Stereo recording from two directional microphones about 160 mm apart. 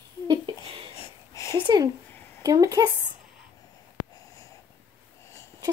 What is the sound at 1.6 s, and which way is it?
Speech, 25° right (ahead or behind).